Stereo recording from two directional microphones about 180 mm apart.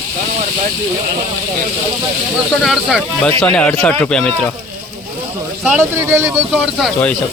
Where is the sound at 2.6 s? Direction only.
Centre (ahead or behind).